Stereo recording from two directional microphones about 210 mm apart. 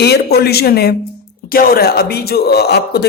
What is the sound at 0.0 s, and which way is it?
Speech, 50° left (ahead or behind).